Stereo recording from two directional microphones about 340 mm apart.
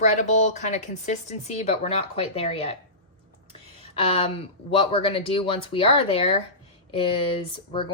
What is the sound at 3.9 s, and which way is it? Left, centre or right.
Speech, centre.